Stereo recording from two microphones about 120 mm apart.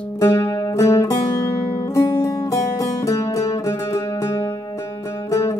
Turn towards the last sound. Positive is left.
turn(degrees=25)  # may be behind; listen again after turning